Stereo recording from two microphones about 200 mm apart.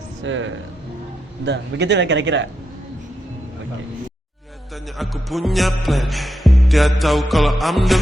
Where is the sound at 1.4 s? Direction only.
60° right (ahead or behind).